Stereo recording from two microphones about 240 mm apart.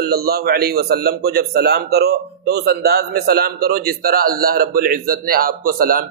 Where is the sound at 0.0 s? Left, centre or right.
Right.